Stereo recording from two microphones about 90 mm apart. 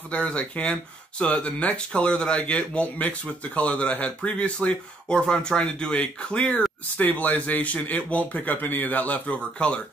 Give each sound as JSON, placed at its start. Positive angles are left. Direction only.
{"t": 0.1, "sound": "speech", "side_deg": 15}